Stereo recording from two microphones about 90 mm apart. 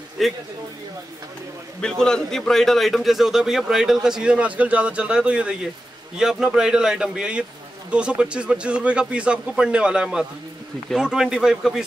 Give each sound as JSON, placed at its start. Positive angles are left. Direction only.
{"t": 0.2, "sound": "a man's voice", "side_deg": 0}
{"t": 1.8, "sound": "a man's voice", "side_deg": 5}